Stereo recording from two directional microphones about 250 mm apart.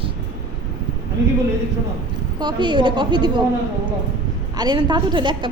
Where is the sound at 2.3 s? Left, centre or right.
Centre.